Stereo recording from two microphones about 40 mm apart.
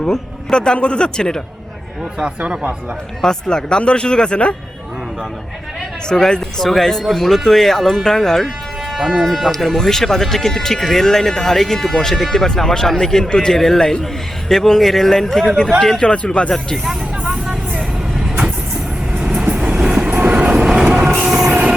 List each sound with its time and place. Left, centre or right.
0.1 s speech: left
3.2 s speech: left
6.1 s speech: centre
15.8 s speech: left
17.2 s vehicle: centre
19.4 s train: right
20.1 s train: right
20.3 s train: right